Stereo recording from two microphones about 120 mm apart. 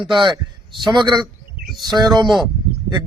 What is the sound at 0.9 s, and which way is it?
A man's voice, 40° right (ahead or behind).